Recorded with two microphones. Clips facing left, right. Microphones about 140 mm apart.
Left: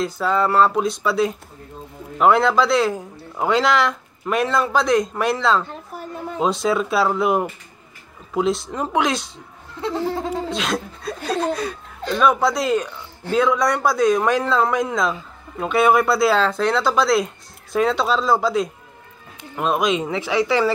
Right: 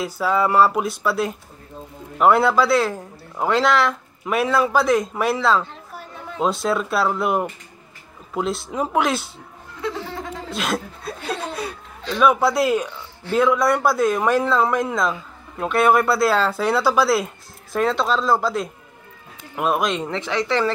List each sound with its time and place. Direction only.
0.0 s a man's voice: 5° right (ahead or behind)
9.9 s snicker: 35° left (ahead or behind)
10.5 s chuckle: 5° right (ahead or behind)
12.2 s a man's voice: 5° right (ahead or behind)